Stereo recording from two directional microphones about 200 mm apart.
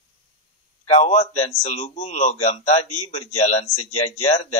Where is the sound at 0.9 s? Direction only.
35° left (ahead or behind).